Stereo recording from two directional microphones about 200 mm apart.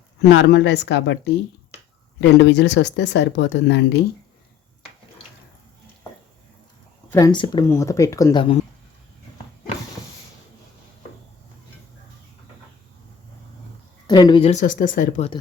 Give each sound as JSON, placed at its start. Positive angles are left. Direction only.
{"t": 0.2, "sound": "speech", "side_deg": 65}
{"t": 2.4, "sound": "speech", "side_deg": 60}
{"t": 7.1, "sound": "speech", "side_deg": 20}
{"t": 14.1, "sound": "speech", "side_deg": 20}
{"t": 14.5, "sound": "speech", "side_deg": 40}